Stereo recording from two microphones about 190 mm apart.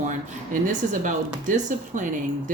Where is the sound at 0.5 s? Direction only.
40° right (ahead or behind).